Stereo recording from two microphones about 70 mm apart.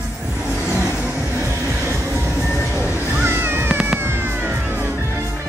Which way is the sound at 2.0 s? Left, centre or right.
Right.